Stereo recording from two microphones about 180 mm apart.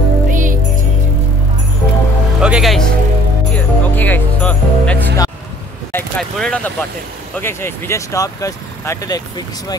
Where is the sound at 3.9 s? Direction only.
10° left (ahead or behind).